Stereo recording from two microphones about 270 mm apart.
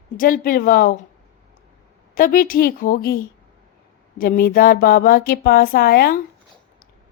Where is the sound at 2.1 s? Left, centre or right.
Left.